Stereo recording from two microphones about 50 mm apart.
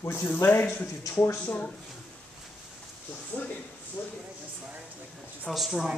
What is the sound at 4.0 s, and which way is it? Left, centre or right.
Speech, left.